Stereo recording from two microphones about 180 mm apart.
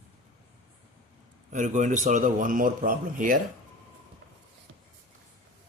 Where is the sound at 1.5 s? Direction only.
45° right (ahead or behind).